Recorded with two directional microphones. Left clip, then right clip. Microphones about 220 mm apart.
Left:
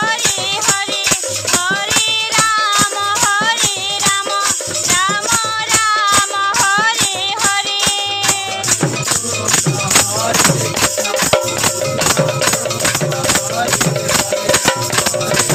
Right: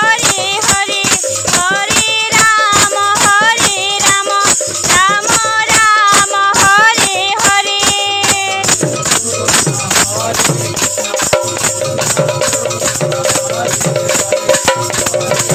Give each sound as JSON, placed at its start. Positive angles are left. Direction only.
{"t": 2.5, "sound": "music", "side_deg": -35}
{"t": 5.5, "sound": "music", "side_deg": -35}